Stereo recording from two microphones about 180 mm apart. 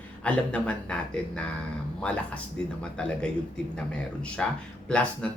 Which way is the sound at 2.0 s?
5° left (ahead or behind).